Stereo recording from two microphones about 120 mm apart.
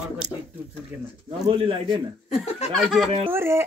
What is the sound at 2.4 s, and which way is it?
Speech, 65° left (ahead or behind).